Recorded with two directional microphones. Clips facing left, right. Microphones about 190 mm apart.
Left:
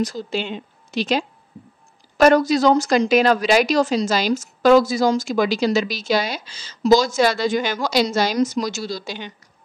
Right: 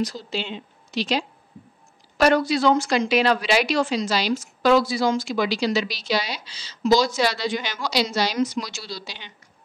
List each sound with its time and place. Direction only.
0.0 s a woman's voice: 50° left (ahead or behind)